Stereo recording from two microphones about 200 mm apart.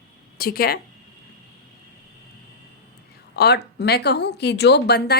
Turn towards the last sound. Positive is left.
turn(degrees=55)  # may be behind; listen again after turning